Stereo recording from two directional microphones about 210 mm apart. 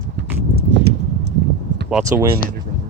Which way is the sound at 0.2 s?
60° right (ahead or behind).